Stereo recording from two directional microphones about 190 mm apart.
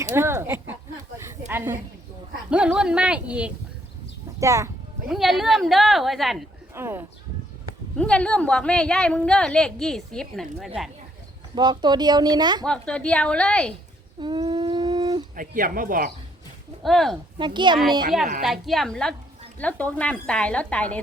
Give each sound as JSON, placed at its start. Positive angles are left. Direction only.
{"t": 0.0, "sound": "speech", "side_deg": -15}
{"t": 1.2, "sound": "a sound", "side_deg": -10}
{"t": 2.5, "sound": "a woman's voice", "side_deg": -5}
{"t": 5.0, "sound": "a woman's voice", "side_deg": 0}
{"t": 6.7, "sound": "speech", "side_deg": -10}
{"t": 7.9, "sound": "a woman's voice", "side_deg": 5}
{"t": 11.5, "sound": "speech", "side_deg": -20}
{"t": 12.6, "sound": "a woman's voice", "side_deg": 5}
{"t": 14.2, "sound": "a sound", "side_deg": -25}
{"t": 15.4, "sound": "speech", "side_deg": -45}
{"t": 16.8, "sound": "a woman's voice", "side_deg": 0}
{"t": 17.3, "sound": "speech", "side_deg": -25}
{"t": 18.4, "sound": "a woman's voice", "side_deg": 0}